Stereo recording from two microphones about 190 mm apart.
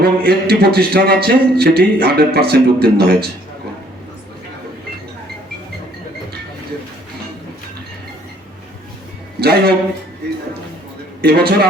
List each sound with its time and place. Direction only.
0.0 s speech: 55° right (ahead or behind)
9.4 s speech: 55° right (ahead or behind)
11.2 s speech: 55° right (ahead or behind)